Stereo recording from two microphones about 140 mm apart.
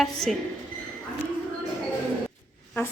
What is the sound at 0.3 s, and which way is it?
Speech, centre (ahead or behind).